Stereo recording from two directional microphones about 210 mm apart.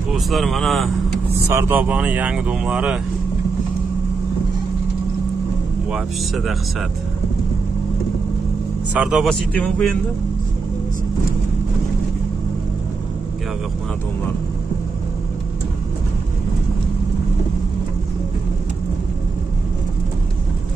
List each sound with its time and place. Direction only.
0.1 s speech: centre (ahead or behind)
1.5 s speech: 10° right (ahead or behind)
5.9 s speech: centre (ahead or behind)
8.9 s speech: 5° right (ahead or behind)